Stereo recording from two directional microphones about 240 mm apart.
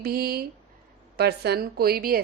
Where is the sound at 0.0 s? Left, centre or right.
Right.